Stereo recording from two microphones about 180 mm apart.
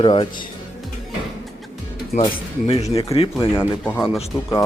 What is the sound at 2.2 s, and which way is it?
Speech, 30° left (ahead or behind).